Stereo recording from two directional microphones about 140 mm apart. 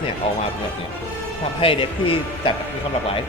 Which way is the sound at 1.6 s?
40° left (ahead or behind).